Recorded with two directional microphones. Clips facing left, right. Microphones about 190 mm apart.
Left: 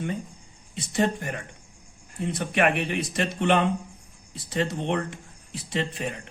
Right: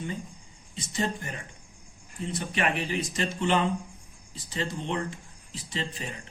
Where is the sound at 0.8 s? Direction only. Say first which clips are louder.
Left 6 dB; 65° left (ahead or behind).